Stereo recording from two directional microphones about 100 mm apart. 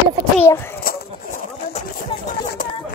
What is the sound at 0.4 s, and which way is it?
Speech, 25° left (ahead or behind).